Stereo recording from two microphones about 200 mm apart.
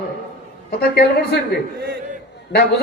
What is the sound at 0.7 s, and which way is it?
Speech, 50° left (ahead or behind).